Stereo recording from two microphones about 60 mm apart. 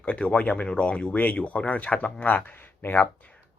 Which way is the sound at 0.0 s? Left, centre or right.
Left.